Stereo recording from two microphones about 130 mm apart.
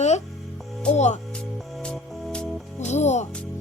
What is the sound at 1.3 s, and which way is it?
Music, 5° left (ahead or behind).